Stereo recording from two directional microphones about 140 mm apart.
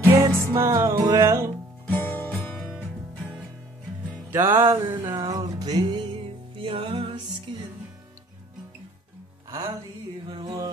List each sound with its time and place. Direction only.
0.0 s music: 20° right (ahead or behind)
1.9 s music: 15° left (ahead or behind)
2.7 s music: 5° right (ahead or behind)
4.6 s music: 30° right (ahead or behind)
10.2 s music: 40° right (ahead or behind)